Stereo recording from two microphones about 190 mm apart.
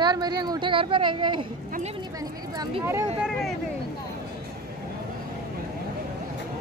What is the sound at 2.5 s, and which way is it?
Speech, 20° right (ahead or behind).